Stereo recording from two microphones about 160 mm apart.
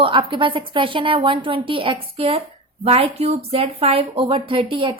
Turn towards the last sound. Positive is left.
turn(degrees=-35)  # may be behind; listen again after turning